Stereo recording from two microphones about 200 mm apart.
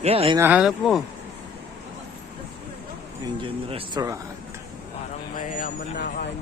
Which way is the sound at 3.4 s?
25° right (ahead or behind).